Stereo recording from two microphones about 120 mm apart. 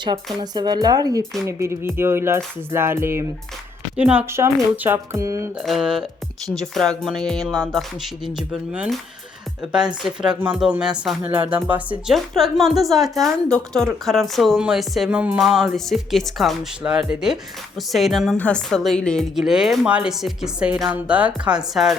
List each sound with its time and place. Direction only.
0.5 s speech: 35° right (ahead or behind)
1.5 s speech: 25° right (ahead or behind)
3.9 s speech: 10° right (ahead or behind)
4.3 s speech: 25° right (ahead or behind)
5.5 s a woman's voice: 5° right (ahead or behind)
12.1 s a woman's voice: centre (ahead or behind)